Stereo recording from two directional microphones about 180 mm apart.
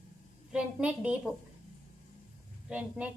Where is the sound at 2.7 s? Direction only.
5° right (ahead or behind).